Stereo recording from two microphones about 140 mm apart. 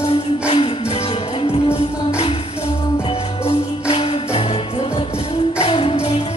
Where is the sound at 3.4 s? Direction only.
45° left (ahead or behind).